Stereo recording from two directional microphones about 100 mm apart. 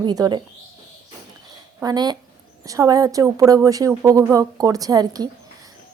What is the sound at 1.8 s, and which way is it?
A woman's voice, 45° right (ahead or behind).